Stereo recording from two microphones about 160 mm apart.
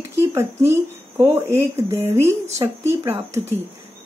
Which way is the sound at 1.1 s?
20° right (ahead or behind).